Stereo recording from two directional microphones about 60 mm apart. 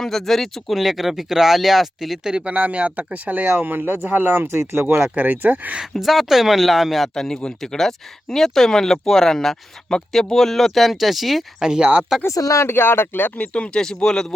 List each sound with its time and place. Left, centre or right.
0.0 s speech: centre
2.5 s speech: right
5.9 s speech: centre
7.1 s speech: centre
11.6 s speech: centre
12.3 s speech: left
12.6 s speech: left
13.4 s speech: centre